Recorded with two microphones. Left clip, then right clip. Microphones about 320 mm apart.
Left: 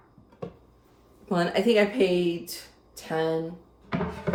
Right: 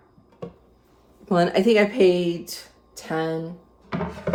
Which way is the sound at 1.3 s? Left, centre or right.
Right.